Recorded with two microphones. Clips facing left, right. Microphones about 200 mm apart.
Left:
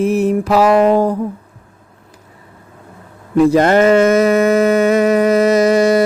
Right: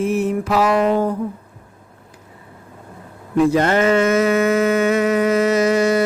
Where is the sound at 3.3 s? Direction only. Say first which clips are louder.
Left 5 dB; 40° left (ahead or behind).